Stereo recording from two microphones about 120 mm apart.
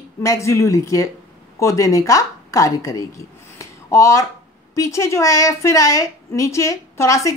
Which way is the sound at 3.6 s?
25° left (ahead or behind).